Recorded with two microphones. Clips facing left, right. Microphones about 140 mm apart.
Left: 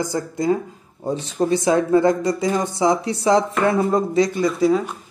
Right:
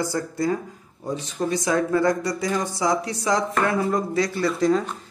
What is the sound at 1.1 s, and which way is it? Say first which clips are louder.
Speech: left 5 dB; 30° left (ahead or behind).